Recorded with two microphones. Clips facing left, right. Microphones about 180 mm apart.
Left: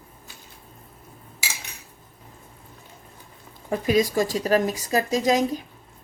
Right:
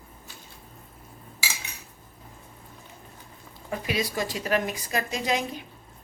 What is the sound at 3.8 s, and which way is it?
Speech, 45° left (ahead or behind).